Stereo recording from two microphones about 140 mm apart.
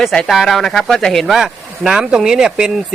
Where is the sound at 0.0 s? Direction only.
Centre (ahead or behind).